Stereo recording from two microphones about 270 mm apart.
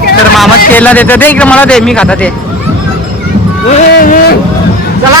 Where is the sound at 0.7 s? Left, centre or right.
Centre.